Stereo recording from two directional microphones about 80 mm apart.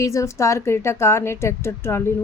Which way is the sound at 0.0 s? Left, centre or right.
Left.